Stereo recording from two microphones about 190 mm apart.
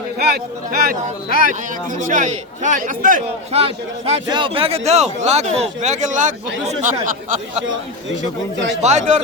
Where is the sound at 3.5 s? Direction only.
30° right (ahead or behind).